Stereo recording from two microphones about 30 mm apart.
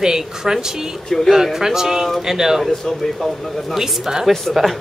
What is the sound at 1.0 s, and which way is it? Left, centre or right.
Speech, centre.